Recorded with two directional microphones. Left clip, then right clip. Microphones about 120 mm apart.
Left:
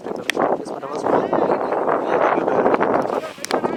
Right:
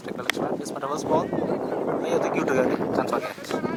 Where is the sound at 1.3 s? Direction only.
50° left (ahead or behind).